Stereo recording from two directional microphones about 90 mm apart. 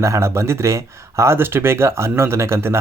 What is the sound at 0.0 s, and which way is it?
Speech, 30° right (ahead or behind).